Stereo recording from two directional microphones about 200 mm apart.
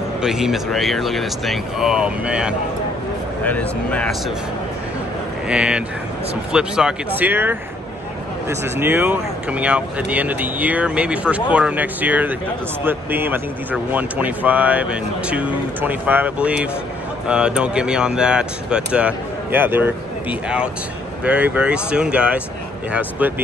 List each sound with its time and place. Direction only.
0.2 s speech: centre (ahead or behind)
3.4 s speech: 5° left (ahead or behind)
5.5 s speech: 5° right (ahead or behind)